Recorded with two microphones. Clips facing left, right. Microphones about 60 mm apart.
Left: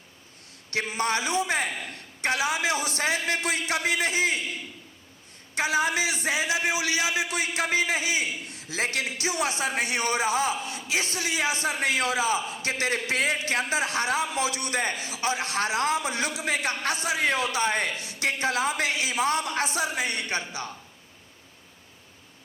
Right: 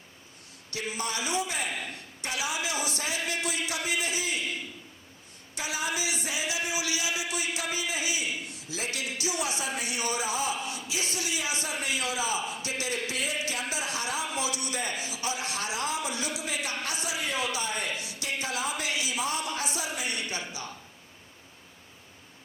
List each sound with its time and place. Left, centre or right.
0.7 s a man's voice: left
5.5 s a man's voice: left